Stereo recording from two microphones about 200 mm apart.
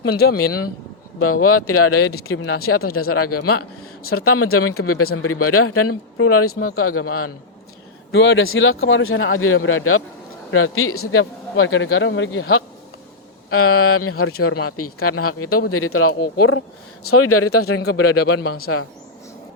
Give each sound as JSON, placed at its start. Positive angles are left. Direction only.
{"t": 0.2, "sound": "a man's voice", "side_deg": 50}
{"t": 1.2, "sound": "a man's voice", "side_deg": 90}
{"t": 8.1, "sound": "a man's voice", "side_deg": 65}
{"t": 17.8, "sound": "a man's voice", "side_deg": 55}